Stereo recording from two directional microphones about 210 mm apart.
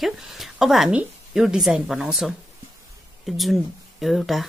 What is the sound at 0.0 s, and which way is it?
Speech, centre (ahead or behind).